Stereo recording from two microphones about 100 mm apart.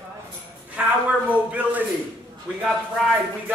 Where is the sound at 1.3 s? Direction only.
15° right (ahead or behind).